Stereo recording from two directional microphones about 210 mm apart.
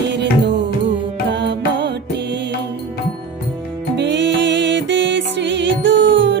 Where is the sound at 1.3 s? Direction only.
55° right (ahead or behind).